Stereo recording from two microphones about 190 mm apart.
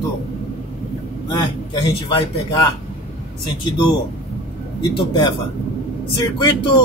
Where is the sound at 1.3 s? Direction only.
20° left (ahead or behind).